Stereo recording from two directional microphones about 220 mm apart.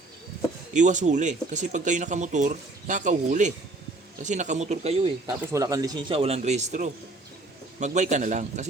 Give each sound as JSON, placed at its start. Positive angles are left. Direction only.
{"t": 0.7, "sound": "speech", "side_deg": -35}
{"t": 5.4, "sound": "speech", "side_deg": -15}